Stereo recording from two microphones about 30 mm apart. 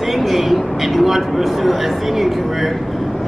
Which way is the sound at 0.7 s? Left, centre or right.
Centre.